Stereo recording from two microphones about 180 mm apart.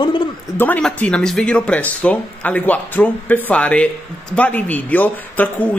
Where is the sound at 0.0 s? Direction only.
25° left (ahead or behind).